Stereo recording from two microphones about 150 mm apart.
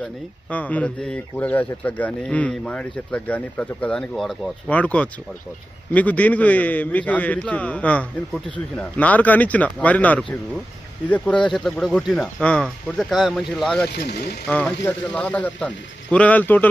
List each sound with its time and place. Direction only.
0.0 s speech: 10° left (ahead or behind)
13.9 s speech: 90° left
14.8 s speech: 10° left (ahead or behind)